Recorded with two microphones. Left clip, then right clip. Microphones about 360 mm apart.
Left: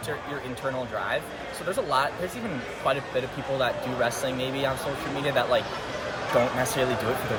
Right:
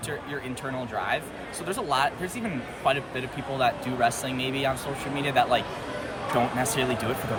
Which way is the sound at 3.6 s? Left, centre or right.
Centre.